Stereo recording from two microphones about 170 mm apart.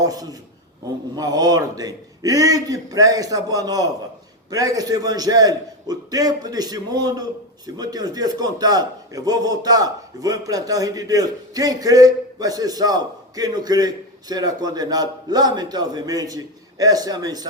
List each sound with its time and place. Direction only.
0.0 s a man's voice: 20° right (ahead or behind)